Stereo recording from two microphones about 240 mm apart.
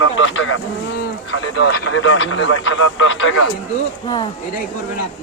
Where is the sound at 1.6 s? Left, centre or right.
Left.